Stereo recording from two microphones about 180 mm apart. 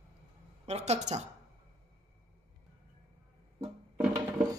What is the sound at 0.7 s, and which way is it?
Speech, 35° right (ahead or behind).